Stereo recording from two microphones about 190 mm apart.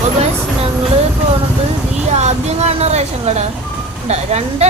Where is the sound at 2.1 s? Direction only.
35° right (ahead or behind).